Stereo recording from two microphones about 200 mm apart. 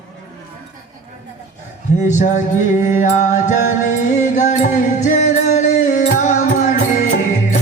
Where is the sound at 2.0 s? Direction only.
40° left (ahead or behind).